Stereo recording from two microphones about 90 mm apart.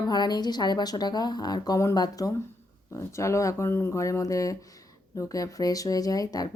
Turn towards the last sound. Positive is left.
turn(degrees=45)  # may be behind; listen again after turning